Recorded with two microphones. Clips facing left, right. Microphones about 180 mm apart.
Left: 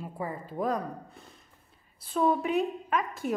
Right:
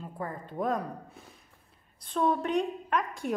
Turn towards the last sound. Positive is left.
turn(degrees=0)  # may be behind; listen again after turning